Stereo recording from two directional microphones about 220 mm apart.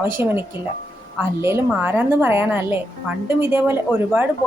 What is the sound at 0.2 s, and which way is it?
Speech, 10° right (ahead or behind).